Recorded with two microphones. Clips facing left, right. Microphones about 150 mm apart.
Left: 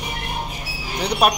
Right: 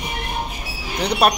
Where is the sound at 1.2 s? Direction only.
10° left (ahead or behind).